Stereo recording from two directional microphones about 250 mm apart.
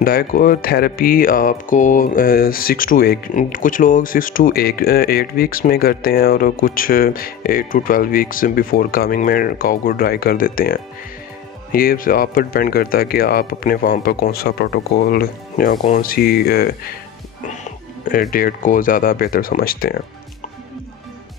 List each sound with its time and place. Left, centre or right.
0.0 s speech: left
18.3 s speech: left